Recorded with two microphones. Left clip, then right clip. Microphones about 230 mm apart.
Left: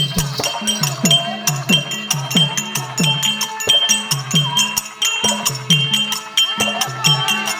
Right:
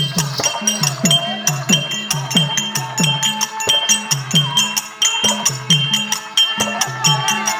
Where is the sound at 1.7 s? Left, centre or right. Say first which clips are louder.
Left 1 dB; centre.